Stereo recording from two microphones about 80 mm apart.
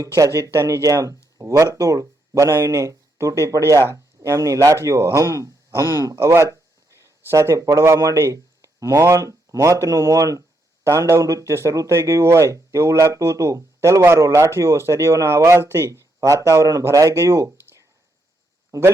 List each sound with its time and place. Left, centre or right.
0.2 s speech: right